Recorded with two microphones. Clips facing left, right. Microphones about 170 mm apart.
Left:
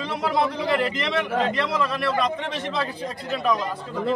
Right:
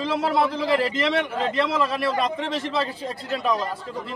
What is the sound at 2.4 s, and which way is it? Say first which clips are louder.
Speech: right 2 dB; centre (ahead or behind).